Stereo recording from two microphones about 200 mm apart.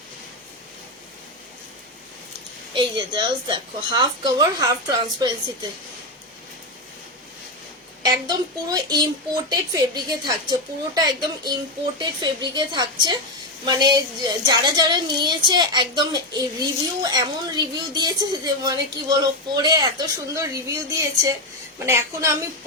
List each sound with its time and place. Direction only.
2.7 s a woman's voice: 25° right (ahead or behind)
8.0 s a woman's voice: 20° right (ahead or behind)